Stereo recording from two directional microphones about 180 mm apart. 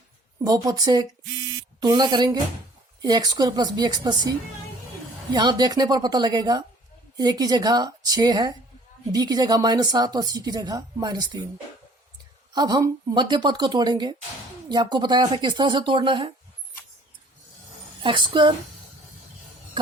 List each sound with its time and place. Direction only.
0.4 s speech: 20° right (ahead or behind)
1.2 s a sound: 80° right
1.8 s speech: 25° right (ahead or behind)
12.5 s speech: 25° right (ahead or behind)
18.0 s speech: 25° right (ahead or behind)